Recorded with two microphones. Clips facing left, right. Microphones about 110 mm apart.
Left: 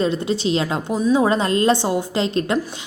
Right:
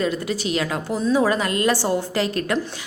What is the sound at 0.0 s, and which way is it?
A woman's voice, 25° left (ahead or behind).